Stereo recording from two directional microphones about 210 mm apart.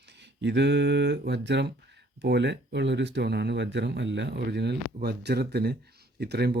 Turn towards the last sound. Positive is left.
turn(degrees=-50)  # may be behind; listen again after turning